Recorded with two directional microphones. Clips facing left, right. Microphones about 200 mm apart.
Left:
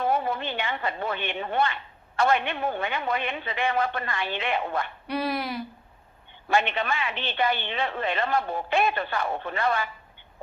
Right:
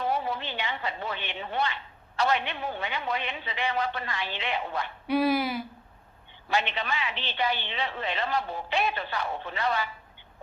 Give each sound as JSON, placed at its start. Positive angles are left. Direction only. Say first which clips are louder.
{"t": 0.0, "sound": "a woman's voice", "louder": "left 3 dB", "side_deg": 50}
{"t": 5.0, "sound": "speech", "louder": "right 7 dB", "side_deg": 0}
{"t": 6.5, "sound": "a woman's voice", "louder": "left 4 dB", "side_deg": 50}